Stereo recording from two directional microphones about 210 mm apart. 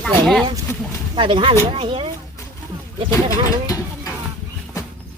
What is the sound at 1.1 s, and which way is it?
Speech, 25° right (ahead or behind).